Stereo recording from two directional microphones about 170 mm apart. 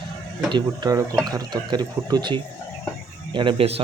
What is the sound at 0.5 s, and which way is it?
Speech, 25° right (ahead or behind).